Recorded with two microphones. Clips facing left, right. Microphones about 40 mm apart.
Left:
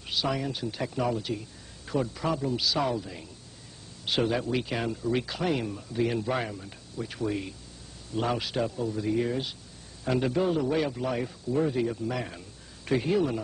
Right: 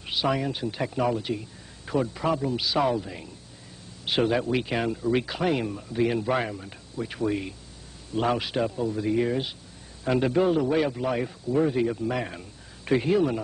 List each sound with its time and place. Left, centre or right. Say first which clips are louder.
0.0 s speech: right 4 dB; centre